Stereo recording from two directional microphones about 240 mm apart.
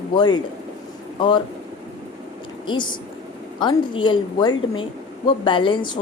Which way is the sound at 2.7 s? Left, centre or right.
Centre.